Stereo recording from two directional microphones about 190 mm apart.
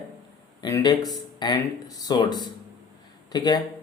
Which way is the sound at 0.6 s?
20° left (ahead or behind).